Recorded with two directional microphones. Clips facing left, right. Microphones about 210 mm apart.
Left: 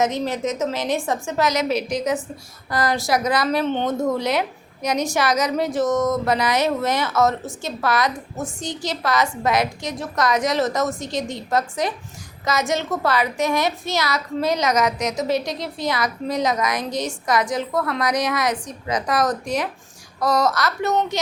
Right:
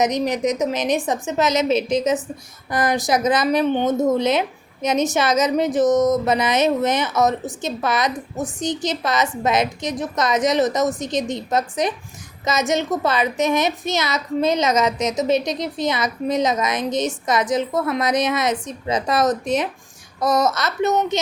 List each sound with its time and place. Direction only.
0.0 s a woman's voice: 15° right (ahead or behind)